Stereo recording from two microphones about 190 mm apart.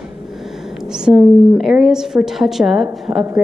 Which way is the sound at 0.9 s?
5° right (ahead or behind).